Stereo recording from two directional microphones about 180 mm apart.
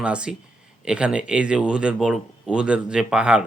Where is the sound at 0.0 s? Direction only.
5° right (ahead or behind).